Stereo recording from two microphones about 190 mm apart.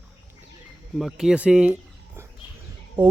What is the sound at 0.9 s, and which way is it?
Speech, centre (ahead or behind).